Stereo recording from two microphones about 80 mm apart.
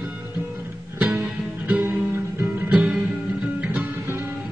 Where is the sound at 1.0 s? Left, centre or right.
Right.